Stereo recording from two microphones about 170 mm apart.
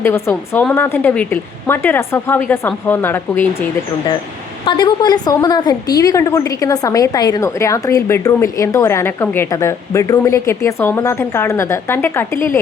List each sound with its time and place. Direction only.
0.0 s a woman's voice: 15° left (ahead or behind)
4.6 s a woman's voice: 25° left (ahead or behind)